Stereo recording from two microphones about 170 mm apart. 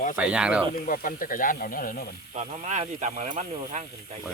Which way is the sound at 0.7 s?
55° left (ahead or behind).